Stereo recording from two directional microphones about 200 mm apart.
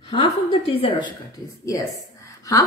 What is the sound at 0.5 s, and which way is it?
Speech, 30° left (ahead or behind).